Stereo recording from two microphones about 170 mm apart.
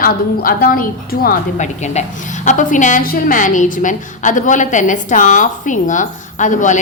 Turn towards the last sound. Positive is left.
turn(degrees=45)  # may be behind; listen again after turning